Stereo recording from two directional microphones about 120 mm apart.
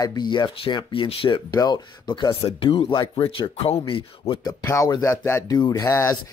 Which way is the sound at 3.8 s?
45° left (ahead or behind).